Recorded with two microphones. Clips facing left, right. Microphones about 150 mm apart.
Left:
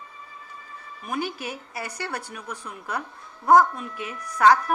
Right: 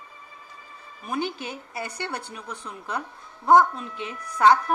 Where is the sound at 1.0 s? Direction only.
30° right (ahead or behind).